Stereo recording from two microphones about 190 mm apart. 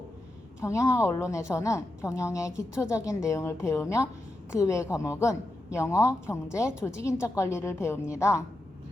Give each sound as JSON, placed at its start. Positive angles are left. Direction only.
{"t": 0.6, "sound": "a woman's voice", "side_deg": 15}